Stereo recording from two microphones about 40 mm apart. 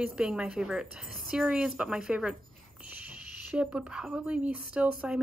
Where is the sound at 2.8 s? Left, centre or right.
Right.